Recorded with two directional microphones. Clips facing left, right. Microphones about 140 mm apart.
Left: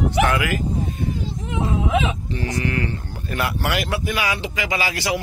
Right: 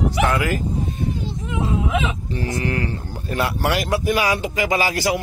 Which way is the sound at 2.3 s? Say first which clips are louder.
Right 3 dB; 40° right (ahead or behind).